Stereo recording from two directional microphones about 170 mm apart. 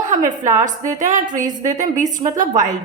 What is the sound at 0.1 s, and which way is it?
A woman's voice, 45° right (ahead or behind).